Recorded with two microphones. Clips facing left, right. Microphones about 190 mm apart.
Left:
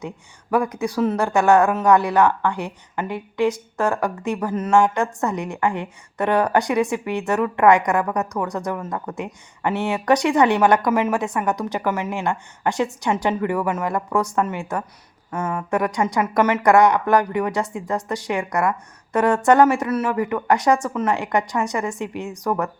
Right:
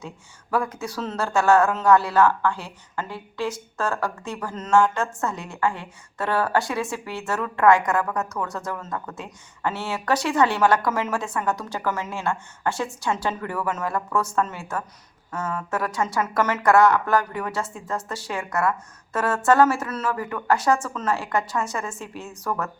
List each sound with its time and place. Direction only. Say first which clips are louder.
0.5 s speech: left 5 dB; 15° left (ahead or behind)